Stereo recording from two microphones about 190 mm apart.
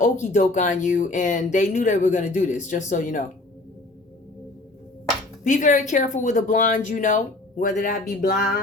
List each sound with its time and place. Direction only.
0.0 s speech: 40° left (ahead or behind)
5.4 s speech: 40° left (ahead or behind)